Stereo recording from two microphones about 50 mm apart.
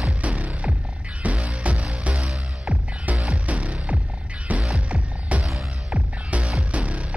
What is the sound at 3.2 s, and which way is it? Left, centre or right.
Music, right.